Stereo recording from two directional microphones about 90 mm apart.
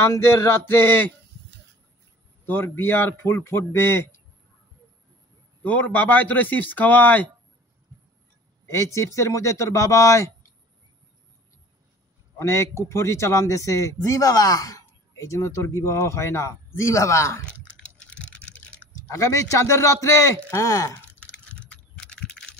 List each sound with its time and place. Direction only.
0.0 s a man's voice: 30° left (ahead or behind)
2.4 s a man's voice: 25° left (ahead or behind)
5.6 s a man's voice: 15° left (ahead or behind)
8.6 s a man's voice: 35° left (ahead or behind)
12.4 s a man's voice: 30° left (ahead or behind)
17.5 s a sound: 10° left (ahead or behind)
19.0 s a man's voice: 40° left (ahead or behind)
21.2 s typing: 10° left (ahead or behind)
21.6 s computer keyboard: 10° left (ahead or behind)